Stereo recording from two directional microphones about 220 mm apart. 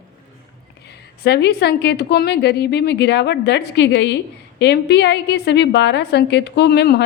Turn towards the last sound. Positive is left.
turn(degrees=50)  # may be behind; listen again after turning